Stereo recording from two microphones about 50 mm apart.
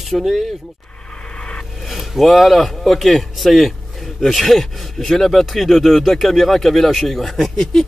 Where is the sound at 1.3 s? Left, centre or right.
Centre.